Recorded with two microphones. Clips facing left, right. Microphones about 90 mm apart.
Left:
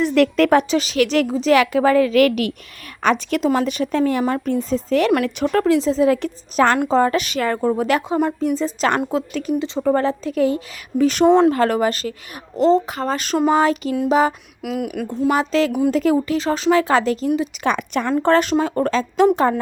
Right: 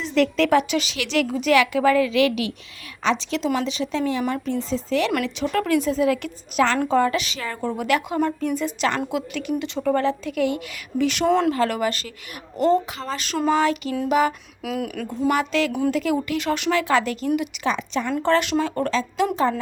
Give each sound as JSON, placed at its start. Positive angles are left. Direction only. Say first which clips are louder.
{"t": 0.0, "sound": "speech", "louder": "left 5 dB", "side_deg": 60}
{"t": 5.6, "sound": "speech", "louder": "left 4 dB", "side_deg": 30}
{"t": 7.2, "sound": "speech", "louder": "left 8 dB", "side_deg": 50}
{"t": 11.3, "sound": "speech", "louder": "left 6 dB", "side_deg": 25}
{"t": 11.5, "sound": "speech", "louder": "left 4 dB", "side_deg": 40}
{"t": 14.6, "sound": "speech", "louder": "left 3 dB", "side_deg": 5}
{"t": 15.3, "sound": "speech", "louder": "left 4 dB", "side_deg": 35}
{"t": 17.6, "sound": "a woman's voice", "louder": "left 4 dB", "side_deg": 55}
{"t": 18.2, "sound": "speech", "louder": "left 4 dB", "side_deg": 45}
{"t": 18.5, "sound": "speech", "louder": "left 4 dB", "side_deg": 25}
{"t": 18.9, "sound": "speech", "louder": "left 7 dB", "side_deg": 45}